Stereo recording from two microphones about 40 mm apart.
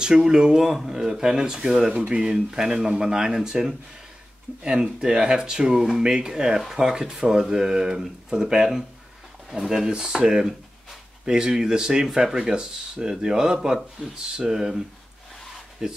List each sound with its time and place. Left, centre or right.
0.0 s speech: centre
13.7 s speech: centre
15.8 s speech: centre